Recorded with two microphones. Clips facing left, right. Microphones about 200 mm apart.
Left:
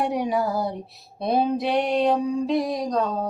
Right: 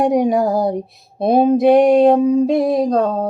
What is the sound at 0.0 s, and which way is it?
Speech, 45° right (ahead or behind).